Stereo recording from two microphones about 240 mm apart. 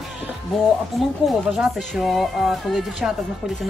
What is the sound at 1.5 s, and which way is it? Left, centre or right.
Speech, centre.